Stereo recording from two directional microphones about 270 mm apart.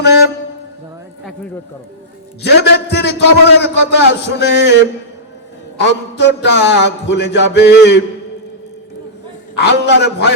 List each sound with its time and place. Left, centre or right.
0.0 s a man's voice: left
2.4 s a man's voice: left
9.6 s a man's voice: left